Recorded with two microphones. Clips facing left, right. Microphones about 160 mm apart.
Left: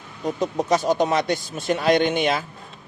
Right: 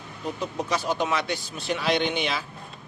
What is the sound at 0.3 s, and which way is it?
Speech, 45° left (ahead or behind).